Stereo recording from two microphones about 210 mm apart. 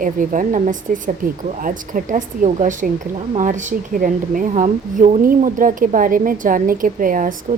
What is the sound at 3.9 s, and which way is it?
Speech, 40° right (ahead or behind).